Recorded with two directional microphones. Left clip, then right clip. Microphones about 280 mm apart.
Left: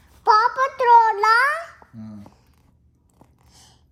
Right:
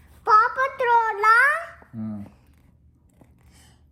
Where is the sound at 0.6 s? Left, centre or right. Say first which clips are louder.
Left 6 dB; centre.